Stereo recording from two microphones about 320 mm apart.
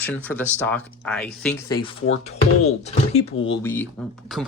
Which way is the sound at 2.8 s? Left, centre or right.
Centre.